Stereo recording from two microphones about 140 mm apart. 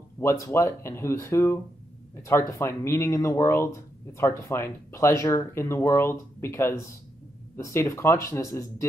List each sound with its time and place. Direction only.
0.2 s speech: 20° left (ahead or behind)